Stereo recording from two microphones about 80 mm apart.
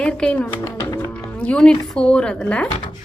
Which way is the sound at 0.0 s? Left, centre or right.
Centre.